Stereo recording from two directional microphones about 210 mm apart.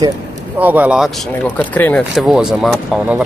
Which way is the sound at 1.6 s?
5° left (ahead or behind).